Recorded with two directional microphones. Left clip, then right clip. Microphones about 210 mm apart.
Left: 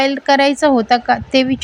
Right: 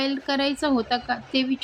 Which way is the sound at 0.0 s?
35° left (ahead or behind).